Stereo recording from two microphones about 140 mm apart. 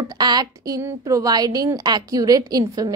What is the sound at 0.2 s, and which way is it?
A woman's voice, 30° right (ahead or behind).